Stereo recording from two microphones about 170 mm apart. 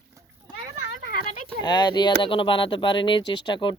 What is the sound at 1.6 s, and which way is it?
Speech, 25° left (ahead or behind).